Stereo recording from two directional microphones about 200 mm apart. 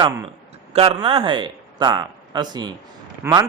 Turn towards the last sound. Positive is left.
turn(degrees=-15)  # may be behind; listen again after turning